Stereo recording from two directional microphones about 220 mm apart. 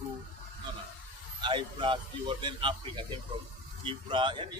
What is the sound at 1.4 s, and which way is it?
A man's voice, 20° right (ahead or behind).